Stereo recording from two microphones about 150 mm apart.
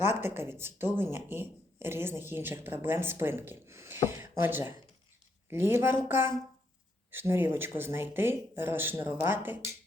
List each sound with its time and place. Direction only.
0.2 s speech: 15° right (ahead or behind)